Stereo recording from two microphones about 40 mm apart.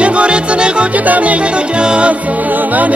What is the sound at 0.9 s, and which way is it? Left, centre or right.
Music, right.